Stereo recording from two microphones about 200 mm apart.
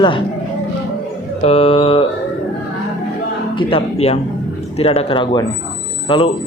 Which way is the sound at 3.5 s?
30° left (ahead or behind).